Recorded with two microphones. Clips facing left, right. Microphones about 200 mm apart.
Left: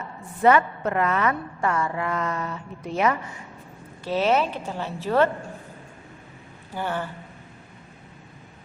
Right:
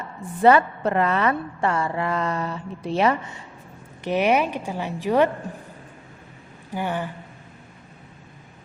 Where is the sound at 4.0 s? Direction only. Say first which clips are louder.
Right 2 dB; 15° right (ahead or behind).